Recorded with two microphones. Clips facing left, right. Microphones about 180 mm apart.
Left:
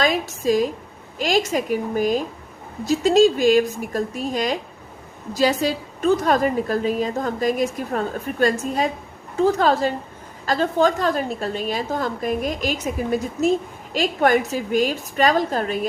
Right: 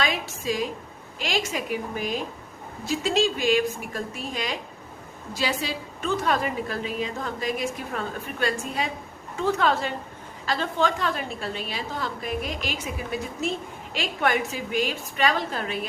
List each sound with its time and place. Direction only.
0.0 s a woman's voice: 40° left (ahead or behind)